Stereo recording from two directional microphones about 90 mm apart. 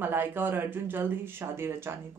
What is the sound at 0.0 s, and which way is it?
Speech, 20° right (ahead or behind).